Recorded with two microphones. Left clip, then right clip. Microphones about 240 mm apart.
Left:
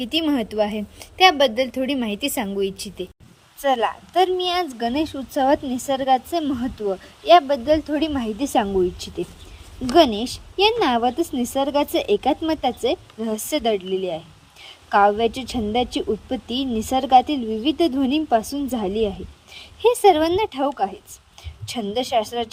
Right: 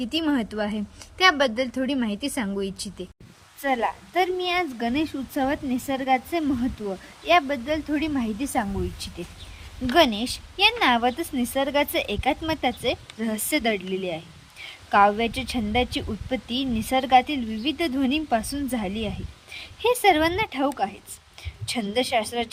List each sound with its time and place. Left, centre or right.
0.0 s speech: centre
0.5 s speech: right
2.0 s speech: centre
3.6 s a woman's voice: centre